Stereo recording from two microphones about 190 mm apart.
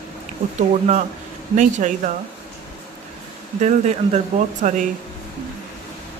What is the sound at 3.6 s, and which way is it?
Speech, 35° right (ahead or behind).